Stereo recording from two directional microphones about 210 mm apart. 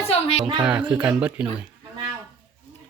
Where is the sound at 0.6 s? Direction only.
5° right (ahead or behind).